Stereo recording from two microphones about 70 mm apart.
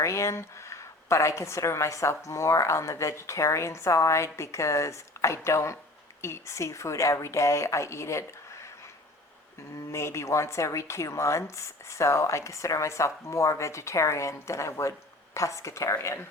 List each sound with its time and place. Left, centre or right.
0.0 s a woman's voice: left
9.9 s a woman's voice: left